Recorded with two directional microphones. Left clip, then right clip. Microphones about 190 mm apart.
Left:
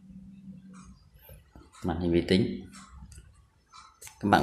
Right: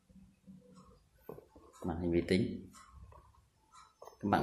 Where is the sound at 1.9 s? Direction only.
5° left (ahead or behind).